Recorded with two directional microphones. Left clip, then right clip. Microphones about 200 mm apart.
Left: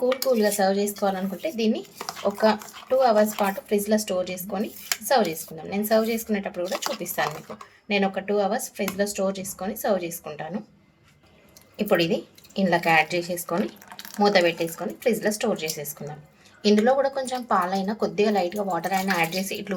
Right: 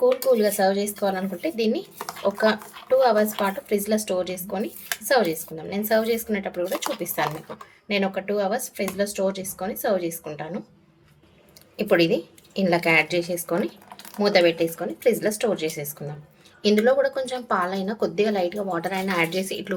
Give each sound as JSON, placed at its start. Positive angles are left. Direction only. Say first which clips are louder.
{"t": 0.3, "sound": "speech", "louder": "right 2 dB", "side_deg": -10}
{"t": 2.0, "sound": "speech", "louder": "right 2 dB", "side_deg": -5}
{"t": 2.4, "sound": "speech", "louder": "left 2 dB", "side_deg": -15}
{"t": 6.6, "sound": "speech", "louder": "right 2 dB", "side_deg": -5}
{"t": 11.8, "sound": "speech", "louder": "right 2 dB", "side_deg": -15}